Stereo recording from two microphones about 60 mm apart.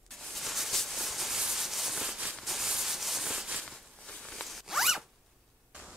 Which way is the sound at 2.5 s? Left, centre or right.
Centre.